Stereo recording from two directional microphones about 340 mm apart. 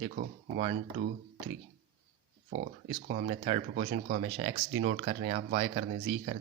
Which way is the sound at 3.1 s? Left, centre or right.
Right.